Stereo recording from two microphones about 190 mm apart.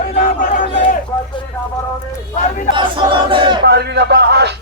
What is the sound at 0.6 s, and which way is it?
Speech, 25° left (ahead or behind).